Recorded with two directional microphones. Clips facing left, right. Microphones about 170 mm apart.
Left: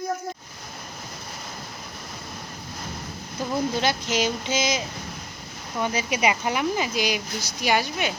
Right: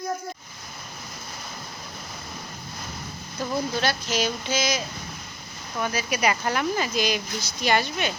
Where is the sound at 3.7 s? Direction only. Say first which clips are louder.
Left 1 dB; 20° left (ahead or behind).